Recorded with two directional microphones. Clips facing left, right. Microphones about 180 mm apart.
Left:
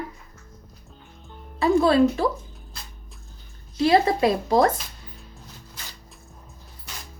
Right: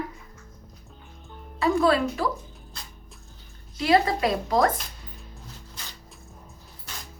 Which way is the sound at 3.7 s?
25° left (ahead or behind).